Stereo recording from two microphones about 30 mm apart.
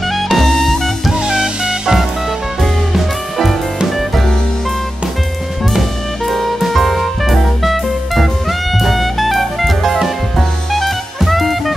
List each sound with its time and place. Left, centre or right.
0.0 s music: centre
1.1 s music: right
2.6 s music: centre
5.8 s music: centre